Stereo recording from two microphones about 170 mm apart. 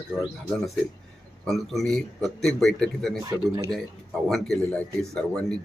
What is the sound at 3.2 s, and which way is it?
Speech, 20° right (ahead or behind).